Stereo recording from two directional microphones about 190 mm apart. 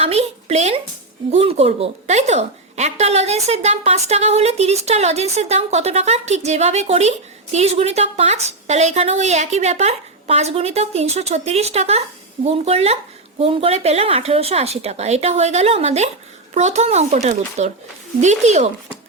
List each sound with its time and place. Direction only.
0.0 s a woman's voice: 35° right (ahead or behind)